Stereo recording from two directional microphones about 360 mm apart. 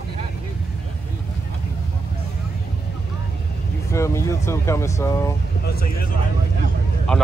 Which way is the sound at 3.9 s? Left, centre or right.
Centre.